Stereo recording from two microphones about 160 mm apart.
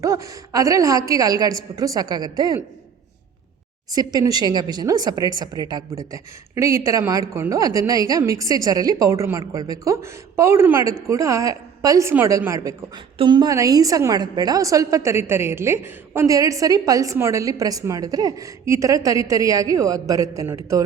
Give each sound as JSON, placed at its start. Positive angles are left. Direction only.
{"t": 0.0, "sound": "a woman's voice", "side_deg": -20}
{"t": 3.9, "sound": "a woman's voice", "side_deg": -25}
{"t": 13.1, "sound": "a woman's voice", "side_deg": -30}